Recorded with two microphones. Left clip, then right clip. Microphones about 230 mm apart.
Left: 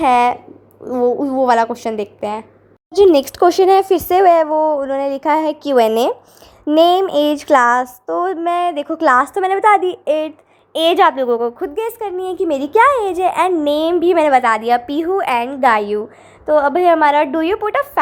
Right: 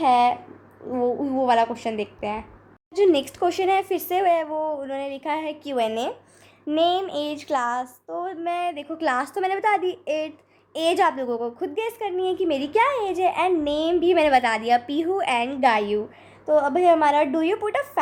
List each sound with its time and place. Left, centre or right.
0.0 s speech: left
9.1 s a woman's voice: centre
9.6 s a woman's voice: centre